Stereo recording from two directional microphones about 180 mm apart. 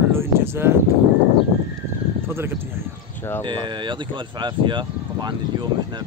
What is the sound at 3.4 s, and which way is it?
Speech, 25° right (ahead or behind).